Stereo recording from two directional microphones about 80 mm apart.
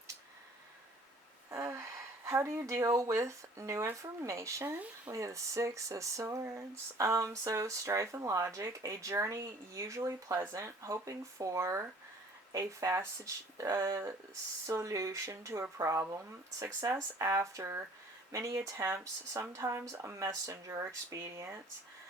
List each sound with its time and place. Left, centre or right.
1.5 s speech: right